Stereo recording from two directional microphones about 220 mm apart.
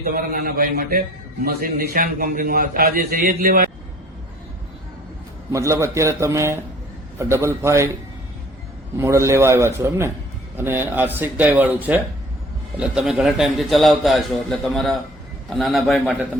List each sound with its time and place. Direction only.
0.0 s a man's voice: 40° right (ahead or behind)
5.5 s speech: 15° right (ahead or behind)
9.0 s a man's voice: 15° right (ahead or behind)